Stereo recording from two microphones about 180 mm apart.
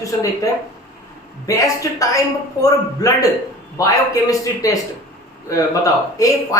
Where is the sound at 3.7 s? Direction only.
20° left (ahead or behind).